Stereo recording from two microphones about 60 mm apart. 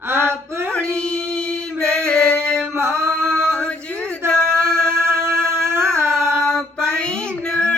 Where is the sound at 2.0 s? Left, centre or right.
Centre.